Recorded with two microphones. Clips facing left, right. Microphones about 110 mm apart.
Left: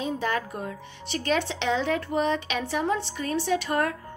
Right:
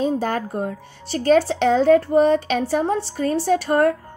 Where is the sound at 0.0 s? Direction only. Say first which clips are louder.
Right 6 dB; 40° right (ahead or behind).